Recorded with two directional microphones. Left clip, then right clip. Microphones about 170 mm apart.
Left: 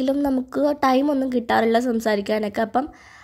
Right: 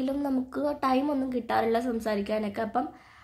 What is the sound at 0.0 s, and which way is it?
A woman's voice, 45° left (ahead or behind).